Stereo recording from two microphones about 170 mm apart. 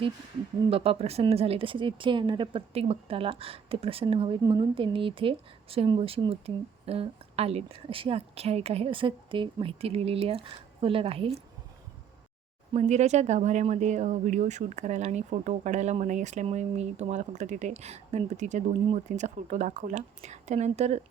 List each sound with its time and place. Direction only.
0.7 s speech: 35° right (ahead or behind)
12.7 s speech: 40° right (ahead or behind)